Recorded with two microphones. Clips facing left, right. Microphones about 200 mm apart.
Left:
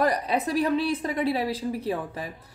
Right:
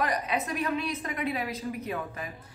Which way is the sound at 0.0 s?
35° left (ahead or behind).